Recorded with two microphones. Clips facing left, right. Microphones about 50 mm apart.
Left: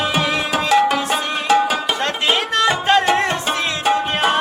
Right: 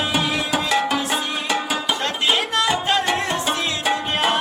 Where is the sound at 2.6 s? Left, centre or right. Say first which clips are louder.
Left 4 dB; left.